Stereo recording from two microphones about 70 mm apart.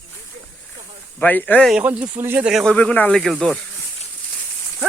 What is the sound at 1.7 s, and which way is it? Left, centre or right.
Speech, centre.